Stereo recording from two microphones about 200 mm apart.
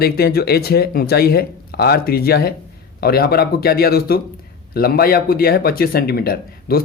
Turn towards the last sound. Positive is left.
turn(degrees=50)  # may be behind; listen again after turning